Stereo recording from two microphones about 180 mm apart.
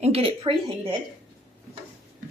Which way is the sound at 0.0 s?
35° right (ahead or behind).